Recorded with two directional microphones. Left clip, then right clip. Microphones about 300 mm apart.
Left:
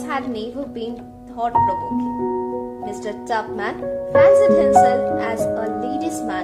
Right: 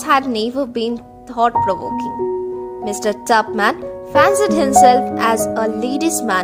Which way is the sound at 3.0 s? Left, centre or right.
Right.